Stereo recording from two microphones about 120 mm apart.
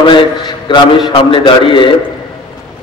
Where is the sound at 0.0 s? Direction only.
40° left (ahead or behind).